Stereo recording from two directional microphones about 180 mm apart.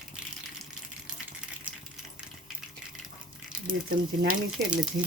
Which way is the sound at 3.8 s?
60° right (ahead or behind).